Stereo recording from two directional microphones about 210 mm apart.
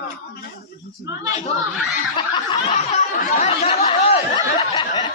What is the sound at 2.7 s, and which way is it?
Snicker, 35° left (ahead or behind).